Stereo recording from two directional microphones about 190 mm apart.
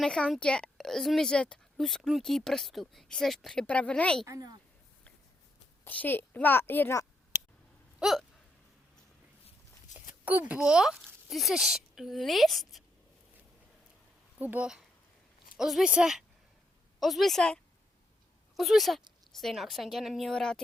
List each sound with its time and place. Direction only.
0.0 s speech: 5° left (ahead or behind)
4.3 s speech: 20° right (ahead or behind)
5.8 s a woman's voice: 10° left (ahead or behind)
7.9 s hiccup: centre (ahead or behind)
9.9 s a sound: 40° left (ahead or behind)
10.5 s speech: 5° right (ahead or behind)
14.3 s speech: 10° right (ahead or behind)